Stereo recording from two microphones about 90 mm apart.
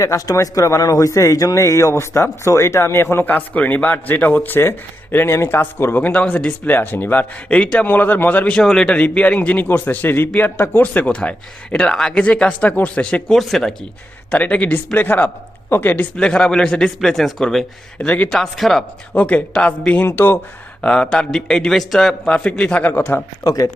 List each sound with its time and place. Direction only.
0.0 s speech: 35° left (ahead or behind); by 13.3 s 15° left (ahead or behind)
13.3 s speech: 5° left (ahead or behind)
14.3 s speech: 15° left (ahead or behind)
16.1 s speech: 10° left (ahead or behind)
19.1 s speech: 15° left (ahead or behind)
20.1 s speech: 25° left (ahead or behind)
20.8 s speech: 10° left (ahead or behind)
23.4 s speech: 40° left (ahead or behind)